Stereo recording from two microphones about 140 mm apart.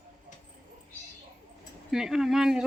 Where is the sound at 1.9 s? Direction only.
5° right (ahead or behind).